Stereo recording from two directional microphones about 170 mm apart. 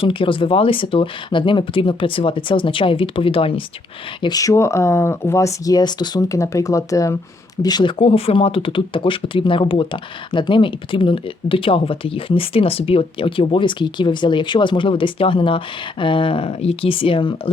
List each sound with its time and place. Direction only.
0.0 s speech: 30° left (ahead or behind)